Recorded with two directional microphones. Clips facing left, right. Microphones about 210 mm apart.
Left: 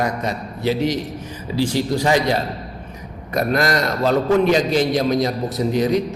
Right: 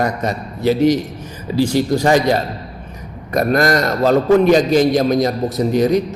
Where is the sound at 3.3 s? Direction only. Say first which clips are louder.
Right 4 dB; 45° right (ahead or behind).